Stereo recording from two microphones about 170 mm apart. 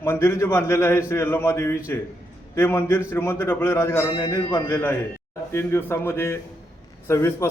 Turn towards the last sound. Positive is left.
turn(degrees=15)  # may be behind; listen again after turning